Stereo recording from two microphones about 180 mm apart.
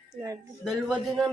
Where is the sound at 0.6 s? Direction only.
Centre (ahead or behind).